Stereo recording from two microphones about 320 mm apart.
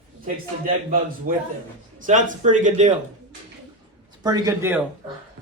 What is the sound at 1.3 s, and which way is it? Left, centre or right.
A man's voice, right.